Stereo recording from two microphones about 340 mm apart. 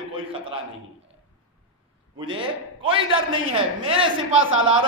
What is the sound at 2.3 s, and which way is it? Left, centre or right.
A man's voice, centre.